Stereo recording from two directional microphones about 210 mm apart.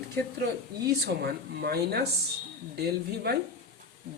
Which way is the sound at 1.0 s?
50° right (ahead or behind).